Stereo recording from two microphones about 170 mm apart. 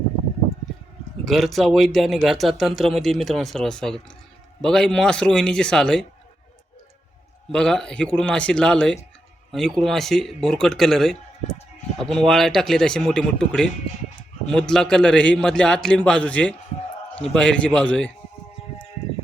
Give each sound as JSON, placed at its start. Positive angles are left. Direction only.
{"t": 1.2, "sound": "speech", "side_deg": 0}
{"t": 7.5, "sound": "speech", "side_deg": 5}